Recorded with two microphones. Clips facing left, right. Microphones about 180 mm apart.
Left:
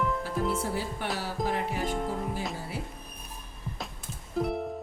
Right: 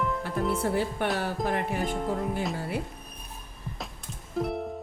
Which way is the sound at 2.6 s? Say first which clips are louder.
Right 5 dB; 60° right (ahead or behind).